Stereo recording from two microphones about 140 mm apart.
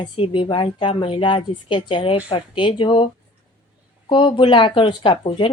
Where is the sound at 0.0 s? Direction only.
35° left (ahead or behind).